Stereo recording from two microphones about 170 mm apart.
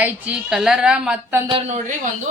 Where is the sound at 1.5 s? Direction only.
30° right (ahead or behind).